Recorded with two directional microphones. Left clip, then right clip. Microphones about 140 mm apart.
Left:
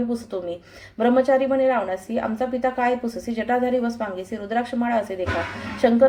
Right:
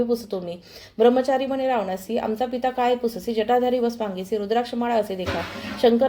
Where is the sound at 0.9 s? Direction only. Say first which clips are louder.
Even; 35° right (ahead or behind).